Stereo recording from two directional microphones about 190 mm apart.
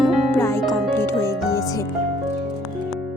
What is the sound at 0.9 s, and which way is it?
Music, 10° left (ahead or behind).